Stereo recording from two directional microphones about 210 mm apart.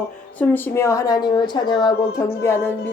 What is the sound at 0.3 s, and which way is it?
A woman's voice, 10° left (ahead or behind).